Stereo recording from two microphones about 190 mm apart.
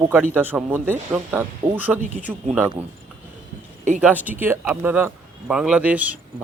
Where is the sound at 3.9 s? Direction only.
10° right (ahead or behind).